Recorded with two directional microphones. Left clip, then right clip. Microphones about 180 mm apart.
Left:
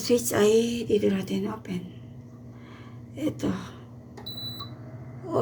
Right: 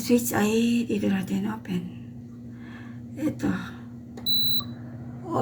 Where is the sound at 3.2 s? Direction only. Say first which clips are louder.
Right 1 dB; centre (ahead or behind).